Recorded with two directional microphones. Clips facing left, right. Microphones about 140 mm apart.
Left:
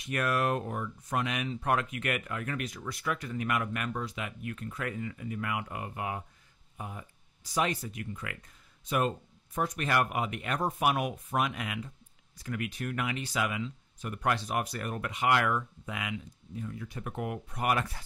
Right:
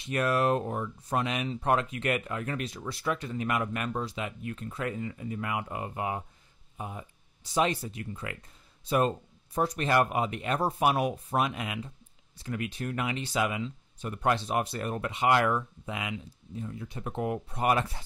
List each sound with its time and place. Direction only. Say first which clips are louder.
0.0 s speech: right 3 dB; 25° right (ahead or behind)